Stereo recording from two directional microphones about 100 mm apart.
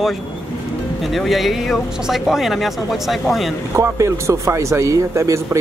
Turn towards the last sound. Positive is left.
turn(degrees=-30)  # may be behind; listen again after turning